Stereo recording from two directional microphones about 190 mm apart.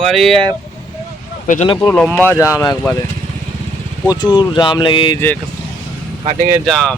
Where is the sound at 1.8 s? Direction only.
10° left (ahead or behind).